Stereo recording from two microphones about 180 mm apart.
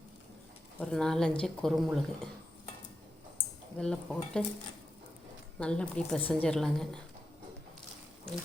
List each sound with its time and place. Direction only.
0.8 s speech: 5° left (ahead or behind)
3.3 s speech: 5° left (ahead or behind)
5.5 s speech: 5° left (ahead or behind)